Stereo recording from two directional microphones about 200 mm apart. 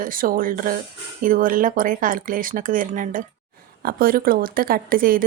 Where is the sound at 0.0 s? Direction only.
45° right (ahead or behind).